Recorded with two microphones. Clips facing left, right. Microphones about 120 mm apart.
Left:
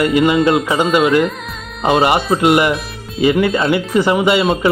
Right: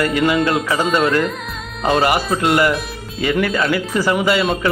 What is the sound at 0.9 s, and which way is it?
Speech, 10° left (ahead or behind).